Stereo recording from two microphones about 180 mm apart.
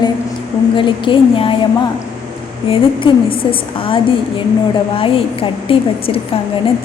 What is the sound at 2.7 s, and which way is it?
A woman's voice, 30° left (ahead or behind).